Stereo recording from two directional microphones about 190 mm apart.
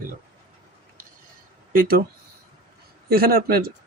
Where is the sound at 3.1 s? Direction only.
50° right (ahead or behind).